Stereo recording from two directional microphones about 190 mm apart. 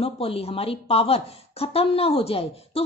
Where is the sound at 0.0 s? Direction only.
30° left (ahead or behind).